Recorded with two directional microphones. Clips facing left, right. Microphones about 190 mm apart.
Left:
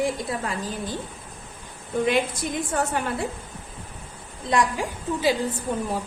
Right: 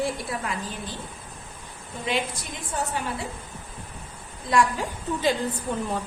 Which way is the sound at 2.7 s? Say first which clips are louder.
Left 3 dB; 60° left (ahead or behind).